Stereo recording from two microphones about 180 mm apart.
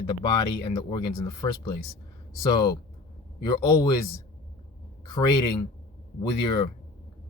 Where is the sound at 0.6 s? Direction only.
25° left (ahead or behind).